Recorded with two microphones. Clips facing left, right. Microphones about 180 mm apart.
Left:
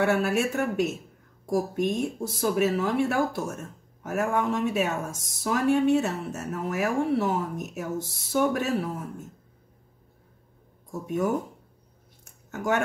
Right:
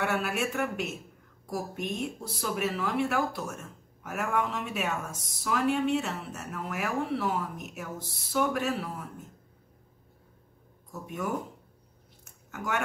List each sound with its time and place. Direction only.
0.1 s a woman's voice: 40° left (ahead or behind)
10.9 s a woman's voice: 45° left (ahead or behind)
12.4 s speech: 45° left (ahead or behind)